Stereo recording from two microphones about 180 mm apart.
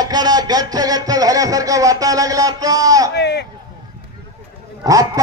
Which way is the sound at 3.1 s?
70° left (ahead or behind).